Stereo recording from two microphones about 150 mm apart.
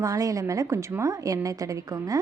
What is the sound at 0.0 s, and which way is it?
A woman's voice, 20° right (ahead or behind).